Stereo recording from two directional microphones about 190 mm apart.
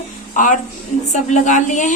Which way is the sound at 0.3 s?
45° left (ahead or behind).